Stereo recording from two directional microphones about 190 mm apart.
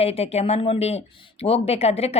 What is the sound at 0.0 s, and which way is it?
Speech, 30° left (ahead or behind).